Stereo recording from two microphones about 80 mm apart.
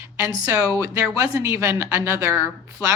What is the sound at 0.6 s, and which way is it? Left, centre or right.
A woman's voice, right.